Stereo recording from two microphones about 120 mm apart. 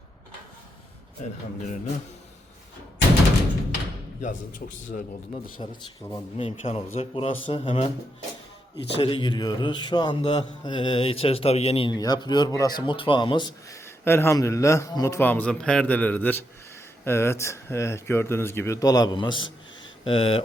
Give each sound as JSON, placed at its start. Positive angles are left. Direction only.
{"t": 1.2, "sound": "speech", "side_deg": 85}
{"t": 4.9, "sound": "speech", "side_deg": 90}
{"t": 6.3, "sound": "a man's voice", "side_deg": 55}
{"t": 9.0, "sound": "a man's voice", "side_deg": 45}
{"t": 10.2, "sound": "a man's voice", "side_deg": 50}
{"t": 11.9, "sound": "a man's voice", "side_deg": 35}
{"t": 13.8, "sound": "speech", "side_deg": 20}
{"t": 15.3, "sound": "a man's voice", "side_deg": 10}